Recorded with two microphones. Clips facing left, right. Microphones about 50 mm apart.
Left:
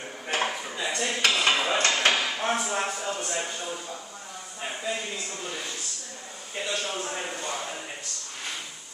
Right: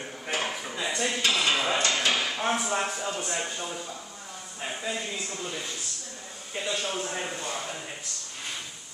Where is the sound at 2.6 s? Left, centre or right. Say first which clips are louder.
Even; centre.